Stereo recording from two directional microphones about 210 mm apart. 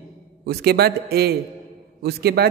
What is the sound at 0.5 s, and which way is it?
A man's voice, 50° right (ahead or behind).